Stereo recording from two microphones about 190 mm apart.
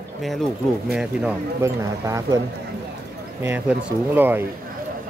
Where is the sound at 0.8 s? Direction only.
5° right (ahead or behind).